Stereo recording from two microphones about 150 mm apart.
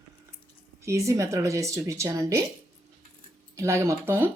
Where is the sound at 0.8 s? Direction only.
20° right (ahead or behind).